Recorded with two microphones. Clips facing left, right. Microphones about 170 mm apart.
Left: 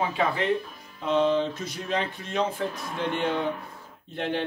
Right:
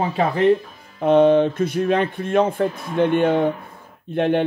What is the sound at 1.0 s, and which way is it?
Speech, 55° right (ahead or behind).